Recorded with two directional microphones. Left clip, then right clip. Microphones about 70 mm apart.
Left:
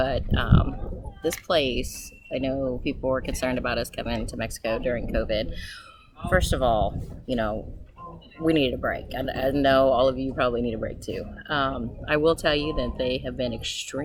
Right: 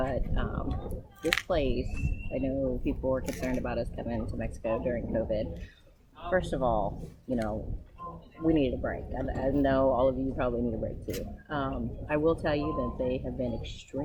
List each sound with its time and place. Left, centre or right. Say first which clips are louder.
0.0 s speech: left 7 dB; left